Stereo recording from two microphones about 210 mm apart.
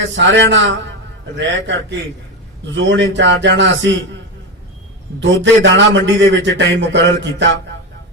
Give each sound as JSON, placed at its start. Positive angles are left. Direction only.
{"t": 0.2, "sound": "a man's voice", "side_deg": -60}
{"t": 5.2, "sound": "a man's voice", "side_deg": -60}